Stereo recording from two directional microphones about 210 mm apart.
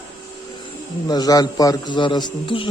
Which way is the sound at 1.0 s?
20° left (ahead or behind).